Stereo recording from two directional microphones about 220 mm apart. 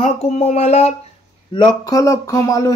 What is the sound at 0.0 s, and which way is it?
Speech, 30° left (ahead or behind).